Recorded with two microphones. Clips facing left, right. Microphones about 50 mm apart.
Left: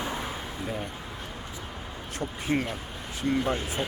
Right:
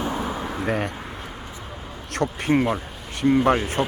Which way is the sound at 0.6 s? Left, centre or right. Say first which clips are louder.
Right 9 dB; right.